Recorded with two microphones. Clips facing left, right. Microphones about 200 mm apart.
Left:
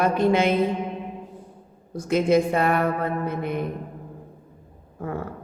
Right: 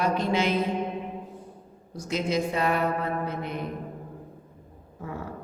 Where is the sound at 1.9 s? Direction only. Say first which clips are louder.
Left 8 dB; 55° left (ahead or behind).